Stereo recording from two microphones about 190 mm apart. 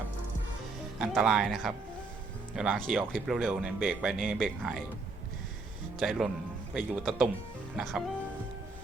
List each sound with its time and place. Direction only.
0.9 s speech: 5° right (ahead or behind)
6.0 s speech: centre (ahead or behind)